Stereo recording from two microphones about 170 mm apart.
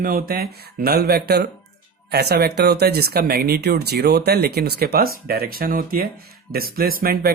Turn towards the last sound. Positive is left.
turn(degrees=-65)  # may be behind; listen again after turning